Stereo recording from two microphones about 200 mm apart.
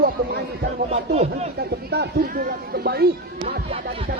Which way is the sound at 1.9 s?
50° right (ahead or behind).